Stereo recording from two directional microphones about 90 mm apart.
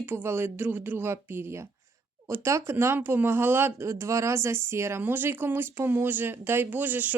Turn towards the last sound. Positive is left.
turn(degrees=-20)  # may be behind; listen again after turning